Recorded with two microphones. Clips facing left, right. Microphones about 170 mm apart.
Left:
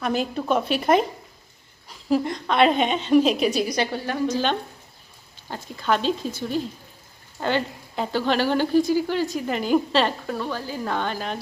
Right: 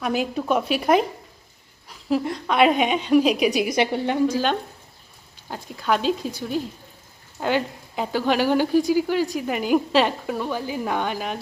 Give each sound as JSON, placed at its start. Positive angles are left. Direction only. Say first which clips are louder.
{"t": 0.0, "sound": "a woman's voice", "louder": "right 1 dB", "side_deg": -10}
{"t": 2.0, "sound": "a woman's voice", "louder": "left 1 dB", "side_deg": -5}
{"t": 4.3, "sound": "a woman's voice", "louder": "right 1 dB", "side_deg": -10}
{"t": 5.5, "sound": "a woman's voice", "louder": "even", "side_deg": -10}